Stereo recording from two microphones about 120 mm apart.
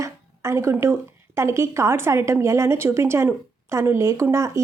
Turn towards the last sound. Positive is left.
turn(degrees=-25)  # may be behind; listen again after turning